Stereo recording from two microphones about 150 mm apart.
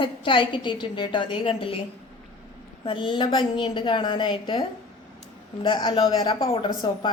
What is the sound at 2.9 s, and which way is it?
A woman's voice, 35° left (ahead or behind).